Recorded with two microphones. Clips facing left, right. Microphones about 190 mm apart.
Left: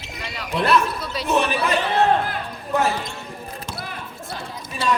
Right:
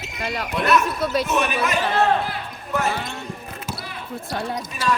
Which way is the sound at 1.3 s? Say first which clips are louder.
Left 2 dB; 30° left (ahead or behind).